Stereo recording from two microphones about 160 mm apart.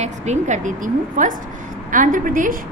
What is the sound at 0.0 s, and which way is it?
A woman's voice, 45° right (ahead or behind).